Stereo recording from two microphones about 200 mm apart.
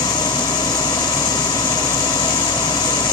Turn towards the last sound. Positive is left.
turn(degrees=20)  # may be behind; listen again after turning